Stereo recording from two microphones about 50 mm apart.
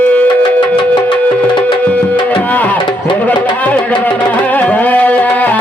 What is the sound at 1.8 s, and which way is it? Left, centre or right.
Tabla, left.